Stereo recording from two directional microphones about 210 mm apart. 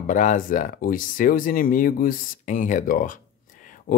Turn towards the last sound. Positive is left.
turn(degrees=40)  # may be behind; listen again after turning